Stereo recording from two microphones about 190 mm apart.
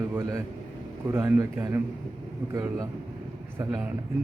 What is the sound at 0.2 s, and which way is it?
A man's voice, 15° right (ahead or behind).